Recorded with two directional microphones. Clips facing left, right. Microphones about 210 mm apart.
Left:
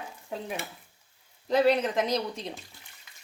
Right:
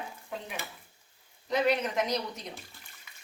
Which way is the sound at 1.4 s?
30° left (ahead or behind).